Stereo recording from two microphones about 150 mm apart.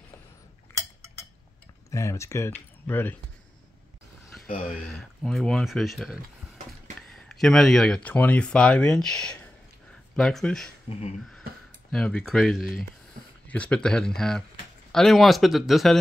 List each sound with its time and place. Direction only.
1.9 s speech: 20° left (ahead or behind)
4.9 s speech: 5° left (ahead or behind)
10.9 s speech: 45° left (ahead or behind)
11.9 s speech: 5° left (ahead or behind)